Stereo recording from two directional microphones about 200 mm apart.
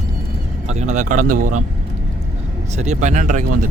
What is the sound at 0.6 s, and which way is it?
Speech, 35° right (ahead or behind).